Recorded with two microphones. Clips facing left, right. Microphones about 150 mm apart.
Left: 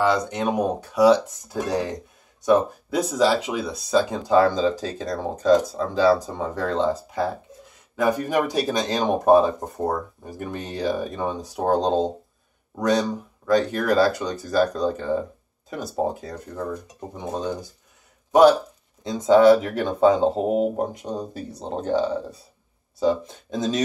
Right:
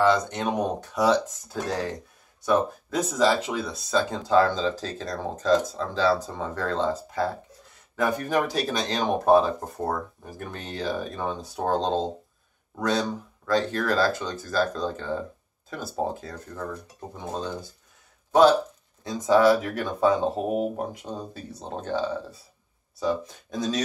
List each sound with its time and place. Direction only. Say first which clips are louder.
0.0 s speech: left 1 dB; 10° left (ahead or behind)
19.0 s speech: left 5 dB; 20° left (ahead or behind)
22.9 s speech: left 5 dB; 25° left (ahead or behind)